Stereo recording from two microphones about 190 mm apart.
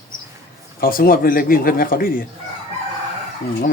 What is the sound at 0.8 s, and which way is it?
A man's voice, 50° left (ahead or behind).